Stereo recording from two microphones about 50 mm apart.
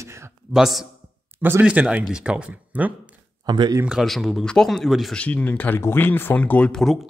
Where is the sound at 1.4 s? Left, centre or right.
Right.